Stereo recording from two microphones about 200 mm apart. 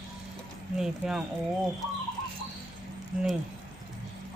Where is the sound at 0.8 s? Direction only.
5° right (ahead or behind).